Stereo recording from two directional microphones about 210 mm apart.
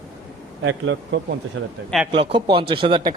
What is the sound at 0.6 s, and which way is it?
A man's voice, 65° right (ahead or behind).